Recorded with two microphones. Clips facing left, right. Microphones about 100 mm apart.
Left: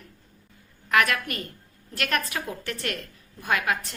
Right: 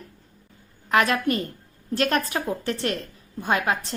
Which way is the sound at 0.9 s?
30° right (ahead or behind).